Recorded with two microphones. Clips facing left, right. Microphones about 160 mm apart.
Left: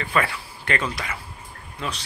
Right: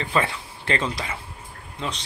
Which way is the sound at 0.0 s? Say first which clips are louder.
Even; 25° right (ahead or behind).